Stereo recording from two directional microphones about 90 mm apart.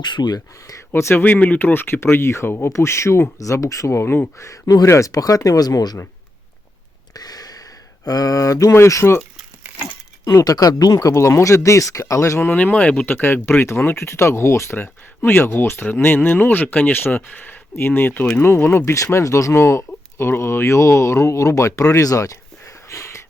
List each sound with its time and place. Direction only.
0.0 s speech: 55° left (ahead or behind); by 1.2 s 30° left (ahead or behind)
1.2 s speech: 15° left (ahead or behind)
4.4 s speech: 40° left (ahead or behind)
7.1 s a sound: 45° left (ahead or behind); by 9.2 s 30° left (ahead or behind)
10.4 s speech: 45° left (ahead or behind)
12.5 s speech: 15° left (ahead or behind)
18.9 s speech: 35° left (ahead or behind)